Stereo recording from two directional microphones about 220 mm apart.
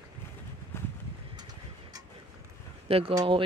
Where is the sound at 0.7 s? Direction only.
10° left (ahead or behind).